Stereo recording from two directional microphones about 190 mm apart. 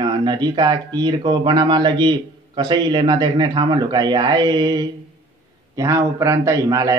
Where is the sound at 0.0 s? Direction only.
25° right (ahead or behind).